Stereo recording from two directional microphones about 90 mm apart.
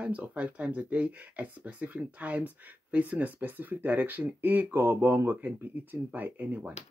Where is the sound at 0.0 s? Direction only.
15° right (ahead or behind).